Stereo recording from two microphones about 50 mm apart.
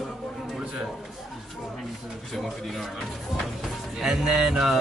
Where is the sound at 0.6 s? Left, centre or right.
Centre.